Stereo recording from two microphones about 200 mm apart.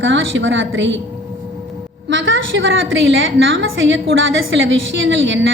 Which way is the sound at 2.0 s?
65° right (ahead or behind).